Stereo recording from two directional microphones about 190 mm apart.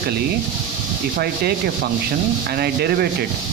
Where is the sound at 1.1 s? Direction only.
55° right (ahead or behind).